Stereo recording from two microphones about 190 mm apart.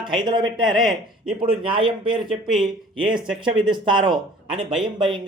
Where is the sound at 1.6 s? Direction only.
25° right (ahead or behind).